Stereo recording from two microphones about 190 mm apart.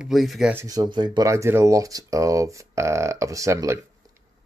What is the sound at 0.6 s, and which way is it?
Speech, 20° right (ahead or behind).